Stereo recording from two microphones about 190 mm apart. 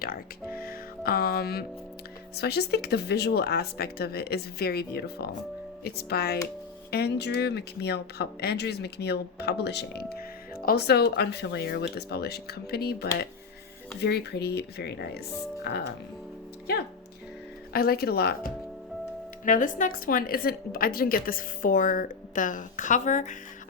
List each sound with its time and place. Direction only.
0.5 s music: 50° left (ahead or behind)
2.3 s speech: 60° left (ahead or behind)
17.7 s a woman's voice: 55° left (ahead or behind)
19.5 s a woman's voice: 45° left (ahead or behind)